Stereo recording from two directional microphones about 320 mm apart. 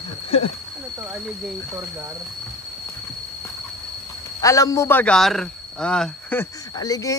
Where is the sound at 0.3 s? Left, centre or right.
Centre.